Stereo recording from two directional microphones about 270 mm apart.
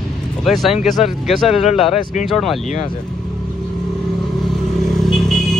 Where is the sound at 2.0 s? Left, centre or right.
Left.